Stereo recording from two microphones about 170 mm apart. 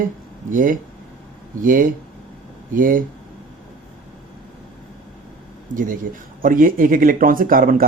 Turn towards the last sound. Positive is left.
turn(degrees=-55)  # may be behind; listen again after turning